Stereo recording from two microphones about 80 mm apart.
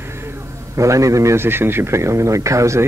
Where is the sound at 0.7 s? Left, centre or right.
Right.